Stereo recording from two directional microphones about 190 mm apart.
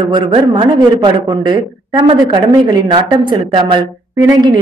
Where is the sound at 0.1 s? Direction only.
25° right (ahead or behind).